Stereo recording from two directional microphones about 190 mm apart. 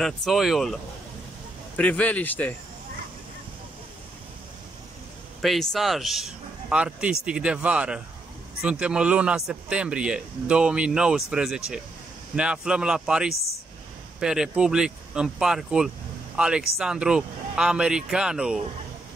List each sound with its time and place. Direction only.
0.0 s speech: centre (ahead or behind)
1.8 s speech: 5° left (ahead or behind)
5.4 s speech: centre (ahead or behind)